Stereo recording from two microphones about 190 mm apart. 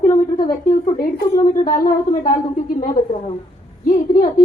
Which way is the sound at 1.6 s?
45° left (ahead or behind).